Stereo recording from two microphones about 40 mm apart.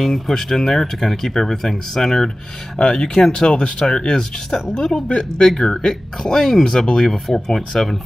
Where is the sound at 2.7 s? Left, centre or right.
Left.